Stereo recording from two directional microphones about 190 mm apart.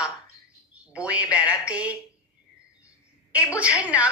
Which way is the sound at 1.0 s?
5° right (ahead or behind).